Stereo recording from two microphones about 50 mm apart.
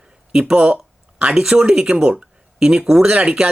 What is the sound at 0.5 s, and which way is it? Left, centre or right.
Speech, right.